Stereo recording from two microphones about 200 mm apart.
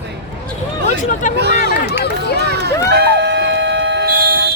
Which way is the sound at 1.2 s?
40° left (ahead or behind).